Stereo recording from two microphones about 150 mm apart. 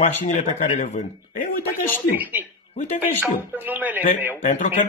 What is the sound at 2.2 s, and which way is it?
Speech, 10° right (ahead or behind).